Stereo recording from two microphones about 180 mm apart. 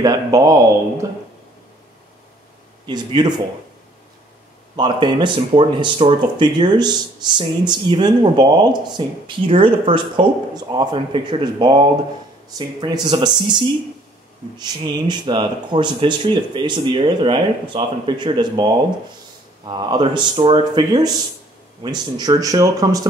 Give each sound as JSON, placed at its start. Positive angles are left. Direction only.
{"t": 0.0, "sound": "speech", "side_deg": -20}
{"t": 2.9, "sound": "speech", "side_deg": -25}
{"t": 4.7, "sound": "speech", "side_deg": -25}